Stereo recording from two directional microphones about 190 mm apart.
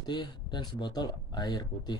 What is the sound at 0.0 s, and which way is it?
A man's voice, 25° left (ahead or behind).